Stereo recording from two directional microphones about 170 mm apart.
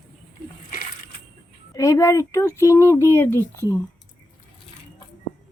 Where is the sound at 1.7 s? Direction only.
20° left (ahead or behind).